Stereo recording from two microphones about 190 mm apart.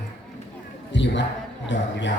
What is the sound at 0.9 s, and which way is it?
A man's voice, 70° left (ahead or behind).